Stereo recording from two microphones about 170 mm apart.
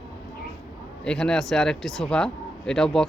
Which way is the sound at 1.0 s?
5° left (ahead or behind).